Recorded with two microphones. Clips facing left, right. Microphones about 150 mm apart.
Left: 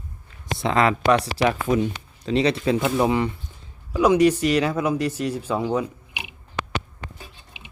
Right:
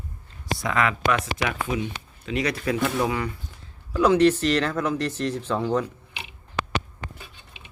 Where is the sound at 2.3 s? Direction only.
25° left (ahead or behind).